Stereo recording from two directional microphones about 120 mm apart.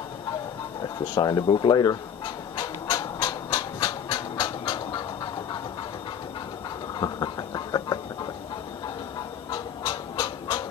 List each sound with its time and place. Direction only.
0.8 s speech: 35° left (ahead or behind)
2.5 s train: 35° left (ahead or behind)
7.0 s a sound: 35° left (ahead or behind)
9.5 s pant: 35° left (ahead or behind)